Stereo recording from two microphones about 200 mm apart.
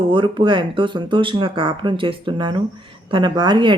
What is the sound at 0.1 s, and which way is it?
Speech, 25° right (ahead or behind).